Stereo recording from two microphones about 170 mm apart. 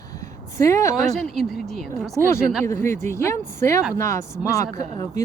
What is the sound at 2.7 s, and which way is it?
Speech, 15° left (ahead or behind).